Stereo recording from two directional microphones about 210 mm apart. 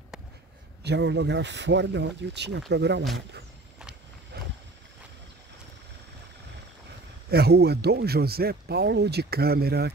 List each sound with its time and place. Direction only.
0.8 s speech: 55° right (ahead or behind)
7.2 s speech: 50° right (ahead or behind)